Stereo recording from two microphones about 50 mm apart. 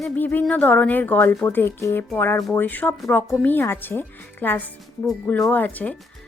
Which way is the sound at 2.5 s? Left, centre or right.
Left.